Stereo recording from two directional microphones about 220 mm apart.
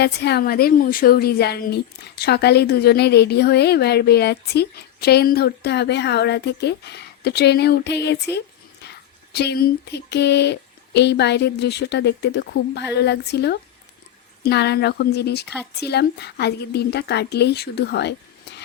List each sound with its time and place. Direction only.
0.0 s a woman's voice: 45° left (ahead or behind)
9.3 s a woman's voice: 50° left (ahead or behind)